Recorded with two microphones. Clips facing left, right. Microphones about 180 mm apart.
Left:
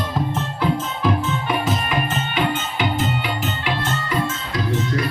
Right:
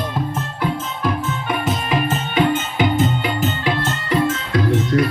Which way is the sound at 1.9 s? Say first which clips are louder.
Right 3 dB; 40° right (ahead or behind).